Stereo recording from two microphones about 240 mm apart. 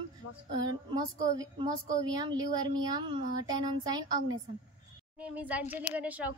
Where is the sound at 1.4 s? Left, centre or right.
Centre.